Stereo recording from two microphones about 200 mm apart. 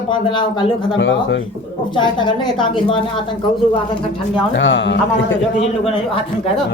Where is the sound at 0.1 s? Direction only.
25° left (ahead or behind).